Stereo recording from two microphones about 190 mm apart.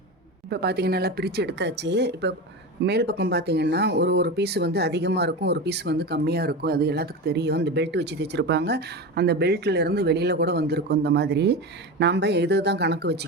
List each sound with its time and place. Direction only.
0.5 s speech: 60° right (ahead or behind)